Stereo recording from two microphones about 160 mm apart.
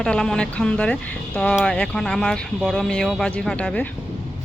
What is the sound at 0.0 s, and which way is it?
Speech, 5° left (ahead or behind).